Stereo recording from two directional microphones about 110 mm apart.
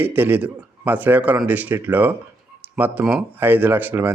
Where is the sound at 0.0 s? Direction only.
15° right (ahead or behind).